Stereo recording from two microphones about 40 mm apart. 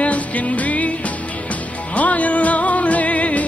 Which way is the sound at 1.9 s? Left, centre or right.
Left.